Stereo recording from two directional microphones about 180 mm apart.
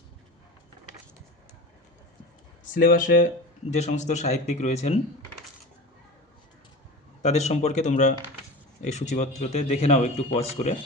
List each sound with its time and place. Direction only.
2.6 s speech: 50° left (ahead or behind)
3.7 s speech: 40° left (ahead or behind)
7.2 s speech: 40° left (ahead or behind)